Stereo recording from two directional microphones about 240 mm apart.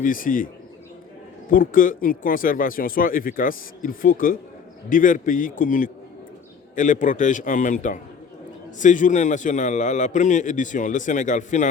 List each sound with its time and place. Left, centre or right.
0.0 s a man's voice: left